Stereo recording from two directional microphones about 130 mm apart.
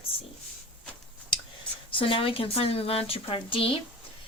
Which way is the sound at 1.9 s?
40° left (ahead or behind).